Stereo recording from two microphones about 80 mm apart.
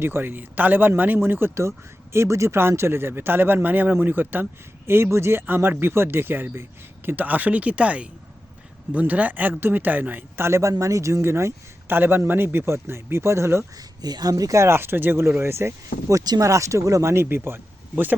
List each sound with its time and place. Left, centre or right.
0.0 s speech: right
13.7 s speech: right